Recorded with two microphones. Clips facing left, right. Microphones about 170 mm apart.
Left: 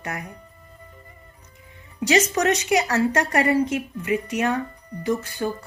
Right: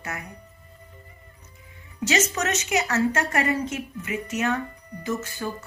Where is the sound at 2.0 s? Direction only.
35° left (ahead or behind).